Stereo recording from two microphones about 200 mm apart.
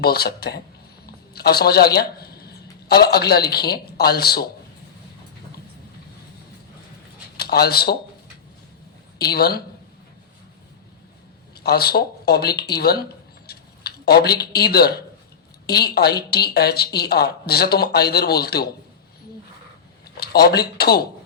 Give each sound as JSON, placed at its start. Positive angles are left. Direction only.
{"t": 0.0, "sound": "a woman's voice", "side_deg": 50}
{"t": 7.3, "sound": "speech", "side_deg": 50}
{"t": 9.1, "sound": "a woman's voice", "side_deg": 50}
{"t": 11.5, "sound": "a woman's voice", "side_deg": 50}
{"t": 20.1, "sound": "speech", "side_deg": 50}